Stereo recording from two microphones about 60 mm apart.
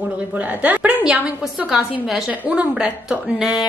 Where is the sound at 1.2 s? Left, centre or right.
Centre.